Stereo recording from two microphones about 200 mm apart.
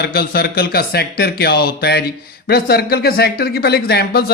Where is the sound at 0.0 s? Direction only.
50° left (ahead or behind).